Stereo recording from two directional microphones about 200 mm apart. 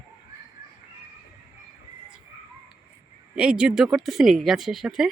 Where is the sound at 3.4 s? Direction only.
5° right (ahead or behind).